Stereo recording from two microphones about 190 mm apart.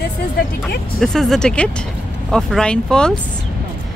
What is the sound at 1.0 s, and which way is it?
Speech, centre (ahead or behind).